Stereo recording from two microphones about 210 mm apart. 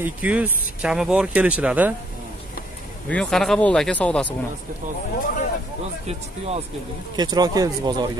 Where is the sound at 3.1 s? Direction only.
5° left (ahead or behind).